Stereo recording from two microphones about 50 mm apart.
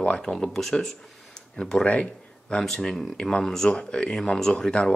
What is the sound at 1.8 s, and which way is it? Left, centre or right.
Speech, left.